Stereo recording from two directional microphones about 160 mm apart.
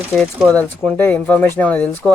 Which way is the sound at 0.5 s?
10° left (ahead or behind).